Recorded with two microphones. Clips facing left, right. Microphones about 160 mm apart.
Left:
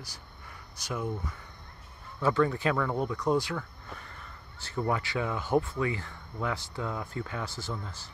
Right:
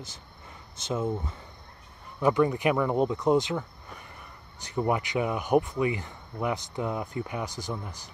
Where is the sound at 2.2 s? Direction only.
15° right (ahead or behind).